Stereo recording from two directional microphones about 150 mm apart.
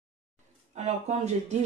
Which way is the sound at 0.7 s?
50° right (ahead or behind).